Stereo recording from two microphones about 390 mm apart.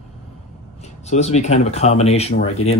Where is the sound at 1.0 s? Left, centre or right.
Centre.